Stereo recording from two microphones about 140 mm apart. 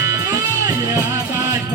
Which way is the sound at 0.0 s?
20° right (ahead or behind).